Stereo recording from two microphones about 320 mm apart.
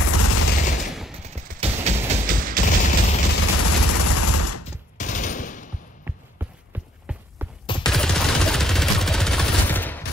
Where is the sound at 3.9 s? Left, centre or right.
Left.